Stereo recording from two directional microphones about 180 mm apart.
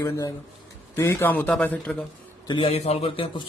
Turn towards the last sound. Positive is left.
turn(degrees=30)  # may be behind; listen again after turning